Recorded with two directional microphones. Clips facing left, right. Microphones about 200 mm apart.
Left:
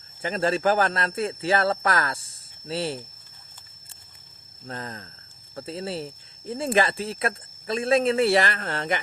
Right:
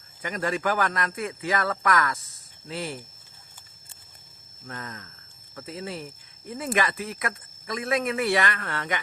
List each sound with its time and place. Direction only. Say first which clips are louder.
0.2 s a man's voice: left 4 dB; 30° left (ahead or behind)
4.6 s a man's voice: left 3 dB; 30° left (ahead or behind)